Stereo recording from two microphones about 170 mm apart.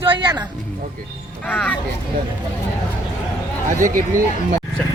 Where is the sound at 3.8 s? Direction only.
50° right (ahead or behind).